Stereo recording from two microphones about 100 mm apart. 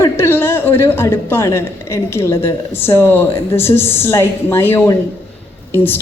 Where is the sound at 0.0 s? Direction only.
25° left (ahead or behind).